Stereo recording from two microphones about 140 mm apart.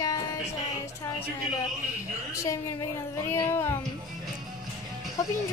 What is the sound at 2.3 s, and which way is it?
A woman's voice, 25° left (ahead or behind).